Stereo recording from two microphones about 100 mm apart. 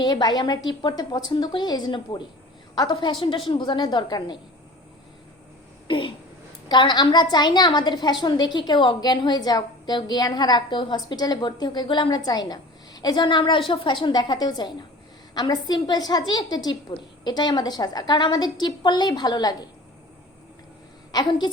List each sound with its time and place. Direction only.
0.0 s a woman's voice: 45° left (ahead or behind)
5.9 s a woman's voice: 55° left (ahead or behind)
21.1 s a woman's voice: 45° left (ahead or behind)